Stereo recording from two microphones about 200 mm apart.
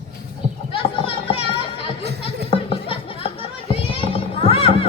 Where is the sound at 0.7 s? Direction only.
25° left (ahead or behind).